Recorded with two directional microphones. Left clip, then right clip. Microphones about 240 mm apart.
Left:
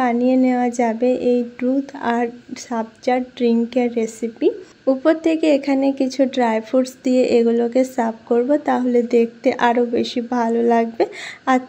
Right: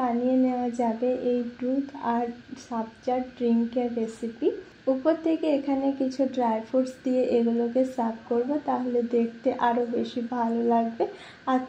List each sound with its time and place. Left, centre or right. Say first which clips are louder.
0.0 s speech: left 8 dB; left